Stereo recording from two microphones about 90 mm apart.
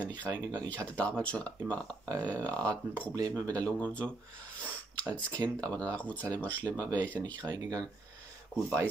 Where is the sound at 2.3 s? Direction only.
40° right (ahead or behind).